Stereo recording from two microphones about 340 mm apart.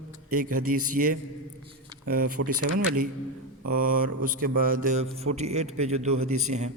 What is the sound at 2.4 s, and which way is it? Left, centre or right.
Speech, right.